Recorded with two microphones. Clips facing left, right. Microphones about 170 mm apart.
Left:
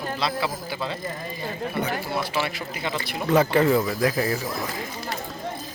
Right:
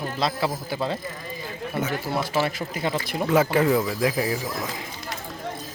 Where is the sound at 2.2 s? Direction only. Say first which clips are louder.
Right 3 dB; 45° right (ahead or behind).